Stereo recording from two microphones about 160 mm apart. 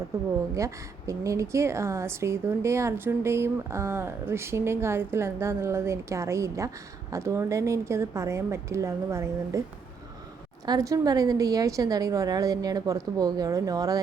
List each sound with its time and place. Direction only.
0.5 s a woman's voice: 20° right (ahead or behind)
10.7 s a woman's voice: 20° right (ahead or behind)